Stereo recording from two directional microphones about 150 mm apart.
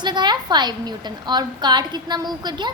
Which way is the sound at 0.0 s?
30° right (ahead or behind).